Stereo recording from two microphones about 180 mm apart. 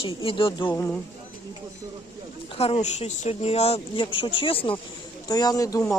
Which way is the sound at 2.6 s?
35° left (ahead or behind).